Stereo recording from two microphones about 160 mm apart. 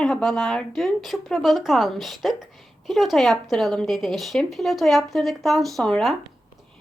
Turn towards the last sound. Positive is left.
turn(degrees=0)  # may be behind; listen again after turning